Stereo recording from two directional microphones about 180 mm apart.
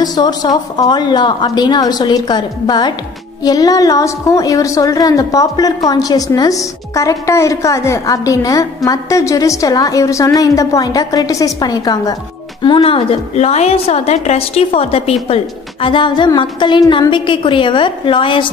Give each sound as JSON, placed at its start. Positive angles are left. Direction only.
{"t": 0.0, "sound": "a woman's voice", "side_deg": 20}